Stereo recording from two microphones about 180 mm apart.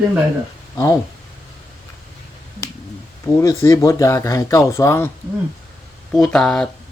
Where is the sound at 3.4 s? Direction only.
15° left (ahead or behind).